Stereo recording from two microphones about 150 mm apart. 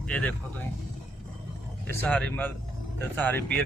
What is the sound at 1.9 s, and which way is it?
Speech, 10° left (ahead or behind).